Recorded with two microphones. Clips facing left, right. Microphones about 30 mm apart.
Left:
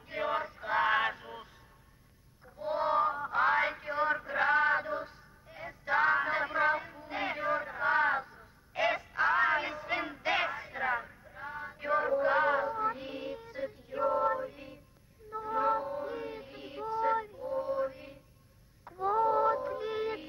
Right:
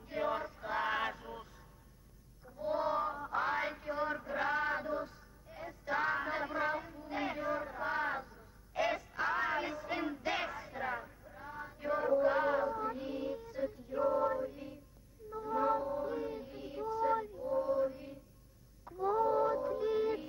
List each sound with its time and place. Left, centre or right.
0.0 s male singing: left
2.4 s a sound: left
11.3 s child singing: left
15.3 s music: left